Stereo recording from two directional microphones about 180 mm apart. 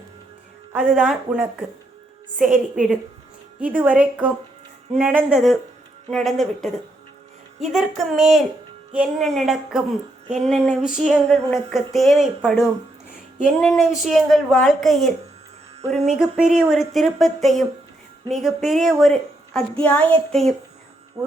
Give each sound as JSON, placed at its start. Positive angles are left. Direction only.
{"t": 0.7, "sound": "a woman's voice", "side_deg": -5}
{"t": 2.7, "sound": "a woman's voice", "side_deg": -5}
{"t": 10.2, "sound": "a sound", "side_deg": -40}
{"t": 10.5, "sound": "a woman's voice", "side_deg": 0}
{"t": 16.1, "sound": "a woman's voice", "side_deg": -5}
{"t": 21.2, "sound": "music", "side_deg": -15}